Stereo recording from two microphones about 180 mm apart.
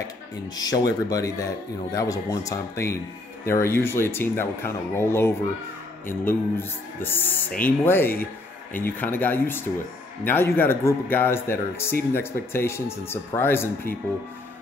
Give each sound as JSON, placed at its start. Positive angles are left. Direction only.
{"t": 0.6, "sound": "a man's voice", "side_deg": 20}